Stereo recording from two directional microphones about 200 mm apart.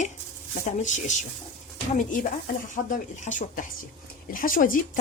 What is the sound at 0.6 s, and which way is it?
Speech, 35° left (ahead or behind).